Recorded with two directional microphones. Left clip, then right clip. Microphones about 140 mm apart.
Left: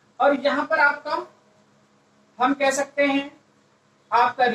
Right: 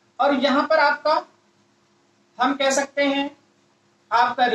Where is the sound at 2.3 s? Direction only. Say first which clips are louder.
Right 1 dB; 30° right (ahead or behind).